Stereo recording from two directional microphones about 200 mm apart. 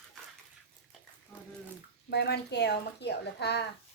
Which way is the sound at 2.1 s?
55° left (ahead or behind).